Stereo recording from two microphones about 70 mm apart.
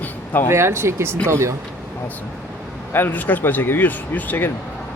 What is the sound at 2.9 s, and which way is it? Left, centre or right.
Speech, left.